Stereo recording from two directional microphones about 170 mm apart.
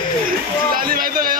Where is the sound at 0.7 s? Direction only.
60° right (ahead or behind).